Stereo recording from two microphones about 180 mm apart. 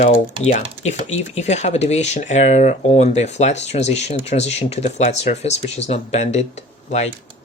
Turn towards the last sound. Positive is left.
turn(degrees=40)  # may be behind; listen again after turning